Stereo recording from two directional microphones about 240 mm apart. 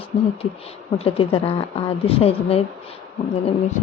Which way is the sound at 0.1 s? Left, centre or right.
Left.